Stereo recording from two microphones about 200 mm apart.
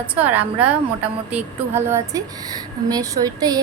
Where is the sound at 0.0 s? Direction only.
10° right (ahead or behind).